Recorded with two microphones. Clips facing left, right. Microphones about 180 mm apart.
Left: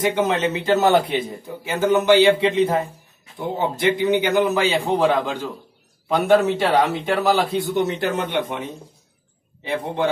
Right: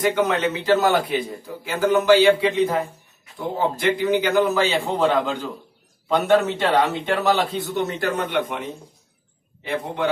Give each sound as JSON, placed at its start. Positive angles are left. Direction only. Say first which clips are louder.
{"t": 0.1, "sound": "a man's voice", "louder": "left 1 dB", "side_deg": 25}